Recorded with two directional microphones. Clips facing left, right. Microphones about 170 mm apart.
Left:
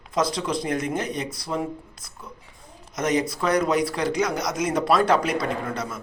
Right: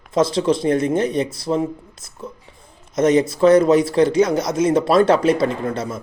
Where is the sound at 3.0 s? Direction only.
25° right (ahead or behind).